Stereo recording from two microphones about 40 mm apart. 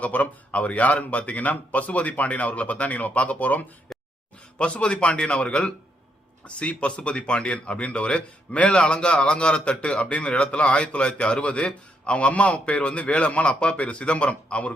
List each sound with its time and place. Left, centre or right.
0.0 s speech: left
3.9 s a sound: centre
4.5 s a man's voice: left